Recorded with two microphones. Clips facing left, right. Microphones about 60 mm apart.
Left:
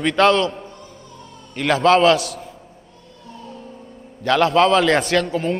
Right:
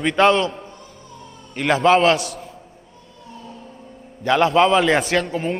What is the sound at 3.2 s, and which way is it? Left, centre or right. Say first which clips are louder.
Vehicle: left 1 dB; centre.